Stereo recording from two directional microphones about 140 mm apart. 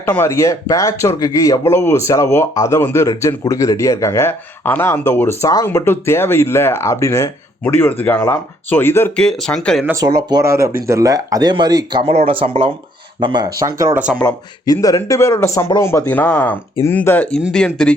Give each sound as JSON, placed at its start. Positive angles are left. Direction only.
{"t": 0.0, "sound": "speech", "side_deg": 20}
{"t": 9.1, "sound": "speech", "side_deg": 5}
{"t": 9.8, "sound": "speech", "side_deg": -25}
{"t": 13.9, "sound": "speech", "side_deg": -10}
{"t": 14.7, "sound": "speech", "side_deg": 25}